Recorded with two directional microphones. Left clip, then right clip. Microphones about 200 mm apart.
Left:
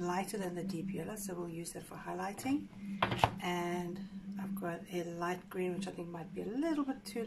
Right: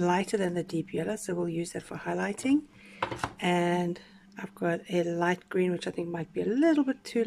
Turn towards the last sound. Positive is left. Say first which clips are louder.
# right 10 dB
turn(degrees=-45)  # may be behind; listen again after turning